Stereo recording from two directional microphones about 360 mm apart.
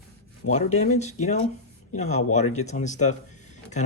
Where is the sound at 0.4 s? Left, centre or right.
Centre.